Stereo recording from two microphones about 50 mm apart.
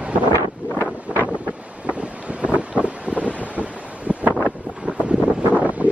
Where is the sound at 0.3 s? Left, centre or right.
Left.